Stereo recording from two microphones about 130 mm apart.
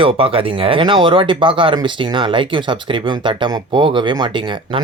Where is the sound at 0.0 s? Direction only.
45° right (ahead or behind).